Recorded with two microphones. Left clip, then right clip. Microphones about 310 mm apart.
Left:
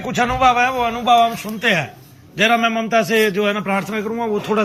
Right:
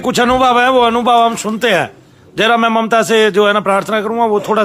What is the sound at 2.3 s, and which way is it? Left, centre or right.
A man's voice, centre.